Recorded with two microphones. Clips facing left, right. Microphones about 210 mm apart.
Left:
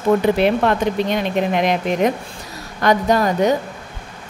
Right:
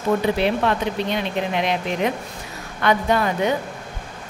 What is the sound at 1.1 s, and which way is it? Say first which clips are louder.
A woman's voice: left 4 dB; 45° left (ahead or behind).